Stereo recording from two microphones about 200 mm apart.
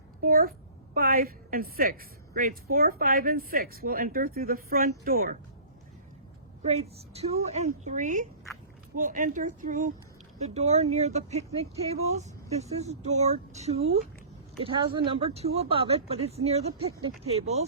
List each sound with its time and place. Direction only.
0.2 s speech: 45° right (ahead or behind)
6.6 s speech: 30° right (ahead or behind)